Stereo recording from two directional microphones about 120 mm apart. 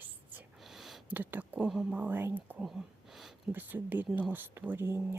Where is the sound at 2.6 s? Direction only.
Centre (ahead or behind).